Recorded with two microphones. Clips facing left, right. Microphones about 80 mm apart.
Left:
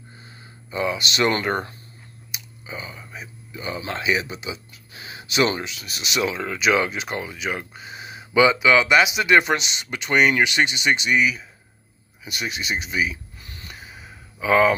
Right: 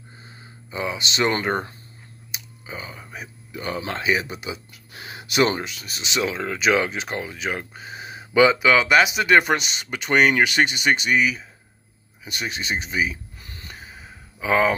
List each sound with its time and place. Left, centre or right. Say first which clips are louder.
0.7 s speech: left 3 dB; right
2.3 s clicking: even; right
3.1 s a sound: right 1 dB; right
3.9 s speech: even; right
12.3 s a sound: even; right
14.4 s speech: left 2 dB; right